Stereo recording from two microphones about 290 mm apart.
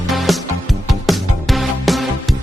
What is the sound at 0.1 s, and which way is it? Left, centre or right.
Music, centre.